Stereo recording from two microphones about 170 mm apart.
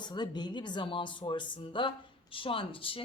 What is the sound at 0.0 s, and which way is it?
Speech, 25° left (ahead or behind).